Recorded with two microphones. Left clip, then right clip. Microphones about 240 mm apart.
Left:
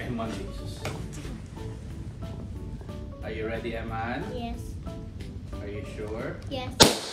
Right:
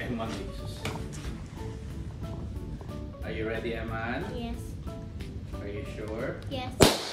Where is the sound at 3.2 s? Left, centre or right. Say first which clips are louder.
Even; centre.